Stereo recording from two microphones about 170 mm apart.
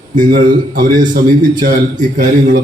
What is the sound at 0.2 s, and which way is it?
A man's voice, 55° right (ahead or behind).